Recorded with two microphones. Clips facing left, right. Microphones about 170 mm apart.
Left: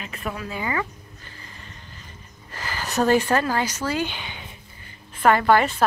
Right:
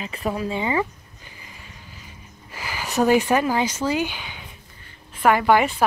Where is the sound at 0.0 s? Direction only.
30° right (ahead or behind).